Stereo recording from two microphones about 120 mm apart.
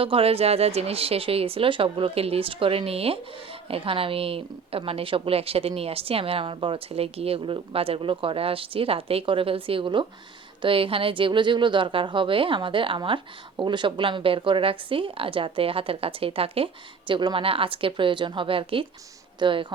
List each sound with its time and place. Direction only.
0.0 s a woman's voice: 50° right (ahead or behind)